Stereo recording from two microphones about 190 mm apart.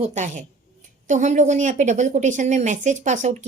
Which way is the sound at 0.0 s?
35° right (ahead or behind).